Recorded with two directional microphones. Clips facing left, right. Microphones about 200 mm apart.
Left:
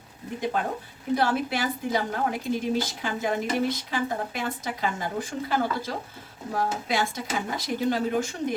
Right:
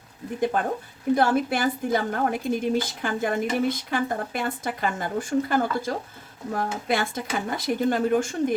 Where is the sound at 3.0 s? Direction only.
50° right (ahead or behind).